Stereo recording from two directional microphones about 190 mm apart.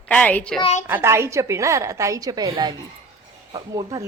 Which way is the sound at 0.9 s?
10° right (ahead or behind).